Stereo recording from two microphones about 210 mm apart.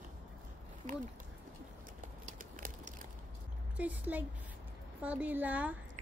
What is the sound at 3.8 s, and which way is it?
A woman's voice, 5° right (ahead or behind).